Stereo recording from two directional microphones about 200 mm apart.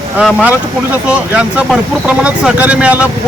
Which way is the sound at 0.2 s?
5° right (ahead or behind).